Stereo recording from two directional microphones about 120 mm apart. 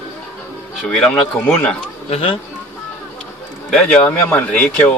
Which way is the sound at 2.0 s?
55° left (ahead or behind).